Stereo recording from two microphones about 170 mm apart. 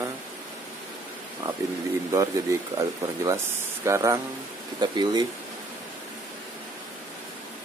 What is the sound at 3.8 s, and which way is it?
Speech, 15° right (ahead or behind).